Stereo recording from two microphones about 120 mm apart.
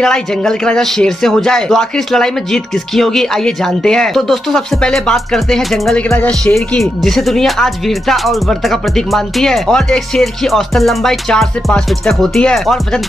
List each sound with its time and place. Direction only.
0.0 s speech: 5° left (ahead or behind)
6.0 s speech: 15° left (ahead or behind)
6.4 s speech: 5° left (ahead or behind)